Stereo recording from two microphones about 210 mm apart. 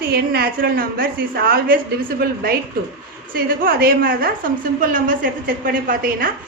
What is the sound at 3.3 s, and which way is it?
A woman's voice, 45° right (ahead or behind).